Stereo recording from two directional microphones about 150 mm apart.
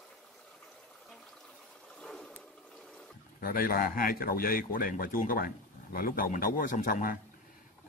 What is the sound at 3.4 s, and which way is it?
Speech, 75° left (ahead or behind).